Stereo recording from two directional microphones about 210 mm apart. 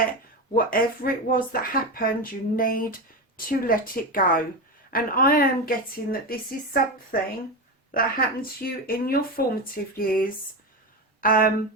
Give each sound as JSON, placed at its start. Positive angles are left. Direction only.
{"t": 0.5, "sound": "speech", "side_deg": 45}